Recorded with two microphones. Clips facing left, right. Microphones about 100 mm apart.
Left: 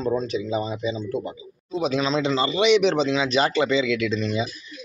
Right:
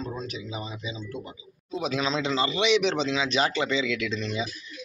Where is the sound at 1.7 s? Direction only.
Centre (ahead or behind).